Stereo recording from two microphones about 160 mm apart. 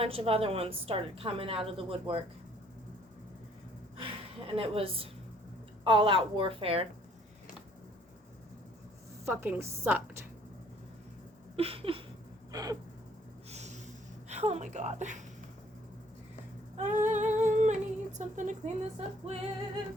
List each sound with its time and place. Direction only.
0.0 s a woman's voice: 40° right (ahead or behind)
3.9 s a woman's voice: 35° right (ahead or behind)
9.2 s a woman's voice: 15° right (ahead or behind)
11.5 s a sound: 35° right (ahead or behind)
12.5 s a sound: 25° right (ahead or behind)
13.5 s snort: 45° right (ahead or behind)
14.3 s speech: 45° right (ahead or behind)
16.7 s speech: 50° right (ahead or behind)
17.3 s humming: 50° right (ahead or behind)
18.2 s speech: 50° right (ahead or behind)